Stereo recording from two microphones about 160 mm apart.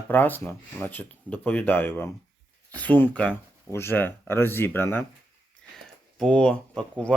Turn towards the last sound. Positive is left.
turn(degrees=5)  # may be behind; listen again after turning